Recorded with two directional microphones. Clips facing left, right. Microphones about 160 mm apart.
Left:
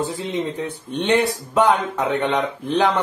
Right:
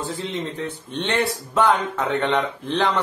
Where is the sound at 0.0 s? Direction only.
15° left (ahead or behind).